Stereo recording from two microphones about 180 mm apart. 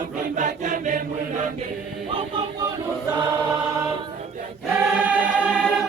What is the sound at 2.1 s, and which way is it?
Choir, 30° right (ahead or behind).